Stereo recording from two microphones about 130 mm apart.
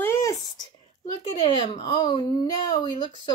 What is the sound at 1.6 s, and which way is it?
Speech, 35° left (ahead or behind).